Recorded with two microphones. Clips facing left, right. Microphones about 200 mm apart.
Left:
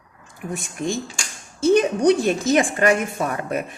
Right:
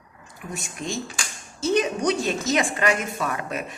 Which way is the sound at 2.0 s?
55° left (ahead or behind).